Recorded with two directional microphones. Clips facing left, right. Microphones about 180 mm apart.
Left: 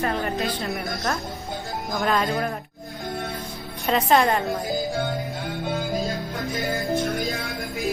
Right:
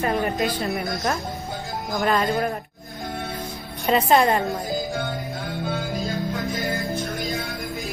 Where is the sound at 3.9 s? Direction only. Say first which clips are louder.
Right 1 dB; 5° right (ahead or behind).